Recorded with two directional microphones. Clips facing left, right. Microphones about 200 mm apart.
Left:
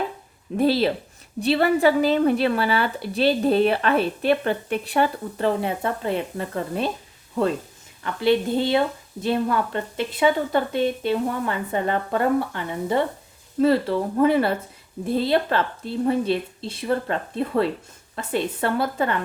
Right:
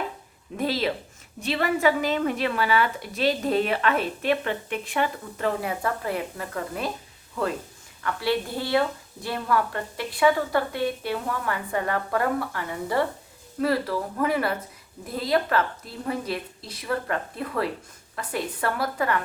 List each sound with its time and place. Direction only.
0.5 s speech: 30° left (ahead or behind)
8.0 s a woman's voice: 20° left (ahead or behind)